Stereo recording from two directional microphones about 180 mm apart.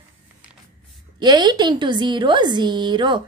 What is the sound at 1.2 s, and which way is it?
A woman's voice, 25° right (ahead or behind).